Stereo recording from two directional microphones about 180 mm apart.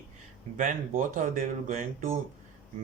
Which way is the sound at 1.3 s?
45° right (ahead or behind).